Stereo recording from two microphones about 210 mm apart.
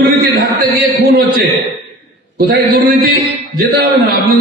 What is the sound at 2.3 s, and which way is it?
A man's voice, 50° right (ahead or behind).